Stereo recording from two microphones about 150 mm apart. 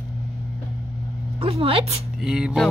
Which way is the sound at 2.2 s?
5° right (ahead or behind).